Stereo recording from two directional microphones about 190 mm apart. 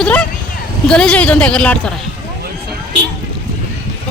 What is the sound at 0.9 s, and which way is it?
Speech, 5° left (ahead or behind).